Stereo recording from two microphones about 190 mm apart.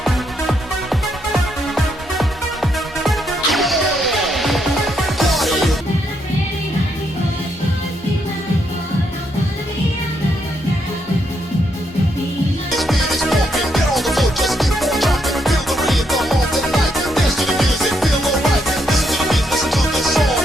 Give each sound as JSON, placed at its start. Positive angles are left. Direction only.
{"t": 0.0, "sound": "music", "side_deg": 0}
{"t": 12.7, "sound": "music", "side_deg": 0}